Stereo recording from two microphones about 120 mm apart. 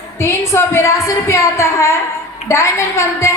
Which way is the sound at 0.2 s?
20° left (ahead or behind).